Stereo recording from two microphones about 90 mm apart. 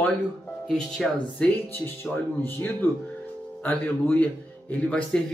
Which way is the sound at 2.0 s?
25° left (ahead or behind).